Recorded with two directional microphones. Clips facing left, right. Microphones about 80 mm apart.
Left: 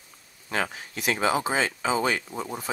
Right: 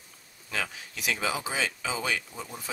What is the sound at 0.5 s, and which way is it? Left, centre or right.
Speech, left.